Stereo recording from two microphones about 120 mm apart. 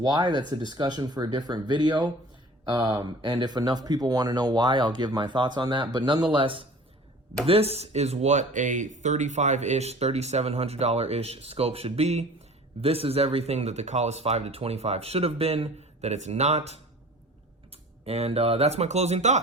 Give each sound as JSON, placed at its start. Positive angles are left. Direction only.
{"t": 0.0, "sound": "speech", "side_deg": -40}